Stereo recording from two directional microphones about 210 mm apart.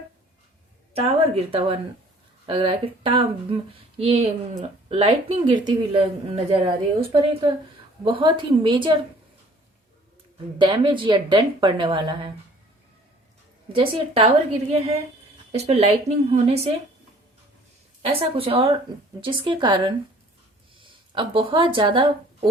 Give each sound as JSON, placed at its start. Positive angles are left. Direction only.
{"t": 0.9, "sound": "speech", "side_deg": -30}
{"t": 10.6, "sound": "speech", "side_deg": -20}
{"t": 13.7, "sound": "speech", "side_deg": -25}
{"t": 18.0, "sound": "a woman's voice", "side_deg": -25}